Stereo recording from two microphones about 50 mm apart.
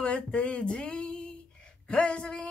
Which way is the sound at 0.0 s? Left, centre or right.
Left.